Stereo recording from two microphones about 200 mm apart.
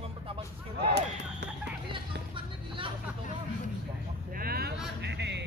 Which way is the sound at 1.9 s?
25° right (ahead or behind).